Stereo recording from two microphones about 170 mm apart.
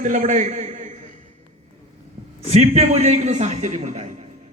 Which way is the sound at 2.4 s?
40° right (ahead or behind).